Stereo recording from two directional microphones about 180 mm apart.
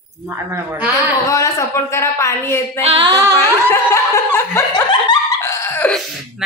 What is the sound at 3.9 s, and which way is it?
Chuckle, 15° left (ahead or behind).